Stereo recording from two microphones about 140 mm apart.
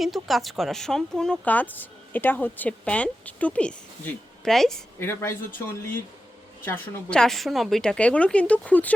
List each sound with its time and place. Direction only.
0.0 s speech: centre (ahead or behind)
4.9 s speech: 15° left (ahead or behind)